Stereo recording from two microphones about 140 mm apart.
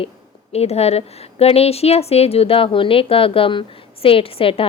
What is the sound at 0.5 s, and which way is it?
A woman's voice, 50° left (ahead or behind).